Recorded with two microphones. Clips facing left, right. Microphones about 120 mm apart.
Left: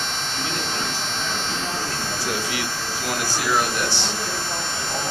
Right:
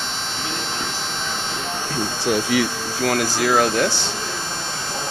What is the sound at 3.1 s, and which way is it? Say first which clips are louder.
Speech: right 5 dB; 90° right.